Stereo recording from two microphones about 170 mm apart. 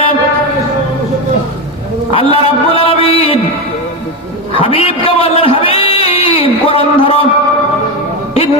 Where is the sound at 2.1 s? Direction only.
35° left (ahead or behind).